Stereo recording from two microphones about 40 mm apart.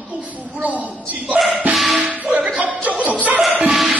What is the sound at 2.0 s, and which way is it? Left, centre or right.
Music, right.